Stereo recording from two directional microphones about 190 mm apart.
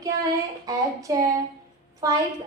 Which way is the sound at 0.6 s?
20° right (ahead or behind).